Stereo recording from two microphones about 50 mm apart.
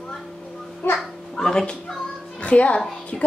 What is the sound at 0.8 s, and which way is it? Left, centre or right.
Speech, left.